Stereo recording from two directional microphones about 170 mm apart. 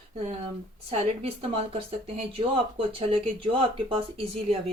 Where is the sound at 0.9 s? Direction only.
35° right (ahead or behind).